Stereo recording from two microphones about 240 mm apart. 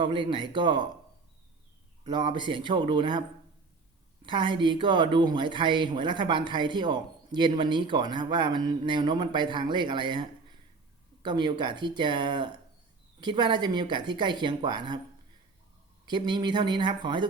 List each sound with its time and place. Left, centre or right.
0.0 s speech: right
2.0 s speech: right
4.3 s speech: right
16.0 s speech: centre